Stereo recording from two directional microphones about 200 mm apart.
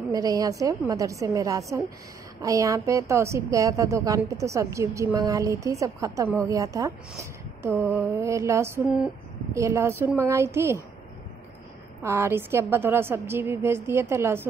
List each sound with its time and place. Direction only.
0.1 s a woman's voice: 20° right (ahead or behind)
9.5 s a woman's voice: 15° right (ahead or behind)
12.0 s a woman's voice: 15° right (ahead or behind)